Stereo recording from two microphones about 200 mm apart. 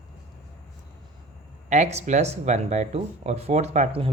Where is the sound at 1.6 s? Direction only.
35° right (ahead or behind).